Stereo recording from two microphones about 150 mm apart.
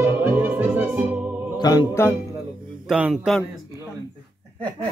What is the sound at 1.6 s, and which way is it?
Music, 25° left (ahead or behind).